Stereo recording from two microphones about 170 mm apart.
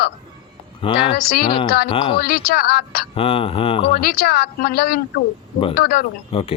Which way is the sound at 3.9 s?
60° left (ahead or behind).